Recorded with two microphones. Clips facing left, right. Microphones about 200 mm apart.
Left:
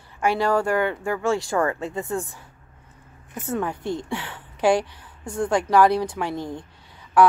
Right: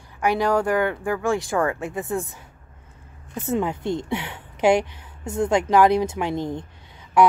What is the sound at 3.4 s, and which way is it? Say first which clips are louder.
A woman's voice: right 3 dB; 20° right (ahead or behind).